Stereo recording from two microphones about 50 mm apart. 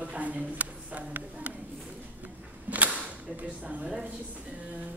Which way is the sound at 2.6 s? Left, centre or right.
Right.